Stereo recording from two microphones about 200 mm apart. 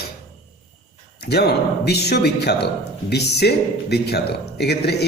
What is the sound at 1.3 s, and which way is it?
Speech, 55° left (ahead or behind).